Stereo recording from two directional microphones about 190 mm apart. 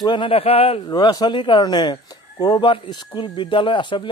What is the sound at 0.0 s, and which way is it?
A man's voice, 25° left (ahead or behind).